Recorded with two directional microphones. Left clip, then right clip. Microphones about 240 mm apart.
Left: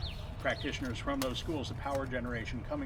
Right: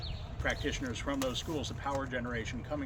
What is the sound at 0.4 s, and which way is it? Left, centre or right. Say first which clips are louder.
Speech: even; right.